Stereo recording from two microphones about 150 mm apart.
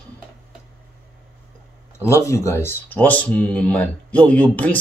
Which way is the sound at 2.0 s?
20° left (ahead or behind).